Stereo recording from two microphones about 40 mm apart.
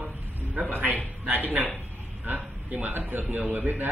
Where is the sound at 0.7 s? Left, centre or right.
Right.